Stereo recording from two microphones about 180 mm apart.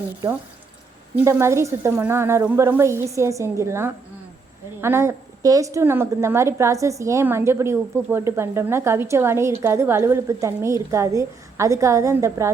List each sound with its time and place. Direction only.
1.1 s a woman's voice: 15° right (ahead or behind)